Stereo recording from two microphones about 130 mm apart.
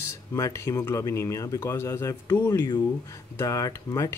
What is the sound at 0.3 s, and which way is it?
Speech, 25° left (ahead or behind).